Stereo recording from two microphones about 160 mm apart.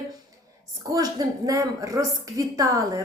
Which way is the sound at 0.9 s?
20° right (ahead or behind).